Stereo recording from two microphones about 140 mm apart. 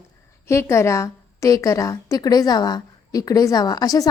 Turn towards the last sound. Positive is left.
turn(degrees=25)  # may be behind; listen again after turning